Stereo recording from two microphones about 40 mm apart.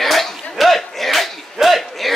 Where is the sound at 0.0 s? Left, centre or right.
Centre.